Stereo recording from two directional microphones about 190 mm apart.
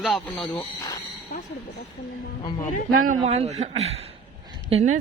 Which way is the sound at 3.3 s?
35° right (ahead or behind).